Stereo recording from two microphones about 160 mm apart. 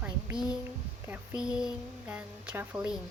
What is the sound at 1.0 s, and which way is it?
A woman's voice, 10° right (ahead or behind).